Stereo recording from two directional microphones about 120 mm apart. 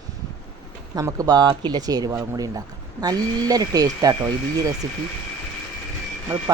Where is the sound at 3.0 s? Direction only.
30° right (ahead or behind).